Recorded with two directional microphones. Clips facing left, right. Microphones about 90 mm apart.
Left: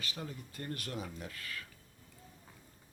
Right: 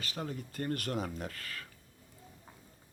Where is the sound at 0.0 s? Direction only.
40° right (ahead or behind).